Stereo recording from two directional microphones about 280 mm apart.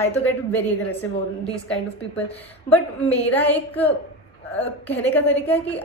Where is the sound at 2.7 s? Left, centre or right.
Centre.